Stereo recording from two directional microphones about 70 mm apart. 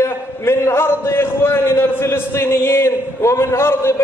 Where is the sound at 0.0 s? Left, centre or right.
Left.